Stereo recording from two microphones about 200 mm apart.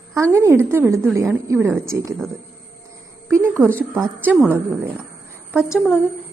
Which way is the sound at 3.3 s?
10° right (ahead or behind).